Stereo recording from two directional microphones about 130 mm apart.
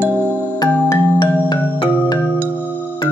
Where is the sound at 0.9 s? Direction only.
35° left (ahead or behind).